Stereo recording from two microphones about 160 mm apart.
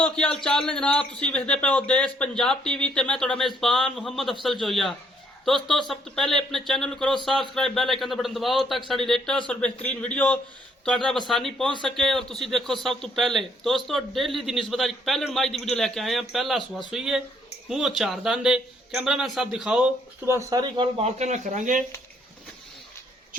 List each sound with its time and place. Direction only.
0.0 s a man's voice: 5° left (ahead or behind)
20.2 s speech: 15° right (ahead or behind); by 21.8 s 55° right (ahead or behind)